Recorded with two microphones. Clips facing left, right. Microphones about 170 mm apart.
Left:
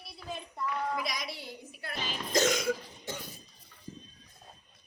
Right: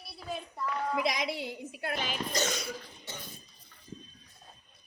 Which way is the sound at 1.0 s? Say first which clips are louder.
Right 6 dB; 60° right (ahead or behind).